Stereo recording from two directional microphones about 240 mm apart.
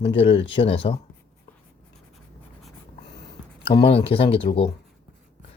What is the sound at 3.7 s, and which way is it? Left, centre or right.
Speech, left.